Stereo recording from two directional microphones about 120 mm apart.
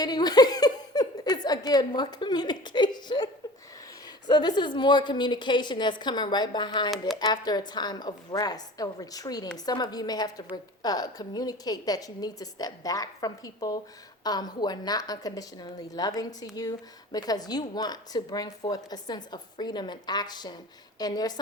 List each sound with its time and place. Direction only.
0.0 s speech: 35° left (ahead or behind)
4.3 s a woman's voice: 40° left (ahead or behind)